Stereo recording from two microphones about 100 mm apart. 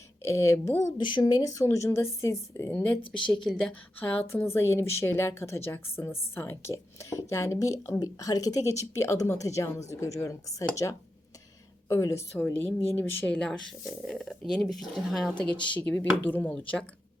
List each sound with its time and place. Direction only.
0.3 s a woman's voice: 30° left (ahead or behind)
0.9 s speech: 50° left (ahead or behind)
1.2 s a woman's voice: 40° left (ahead or behind)
3.2 s speech: 55° left (ahead or behind)
3.4 s speech: 5° left (ahead or behind)
3.7 s speech: 15° left (ahead or behind)
4.4 s a woman's voice: 25° left (ahead or behind)
12.4 s a woman's voice: 20° left (ahead or behind)
13.3 s speech: 5° left (ahead or behind)
15.6 s speech: 15° left (ahead or behind)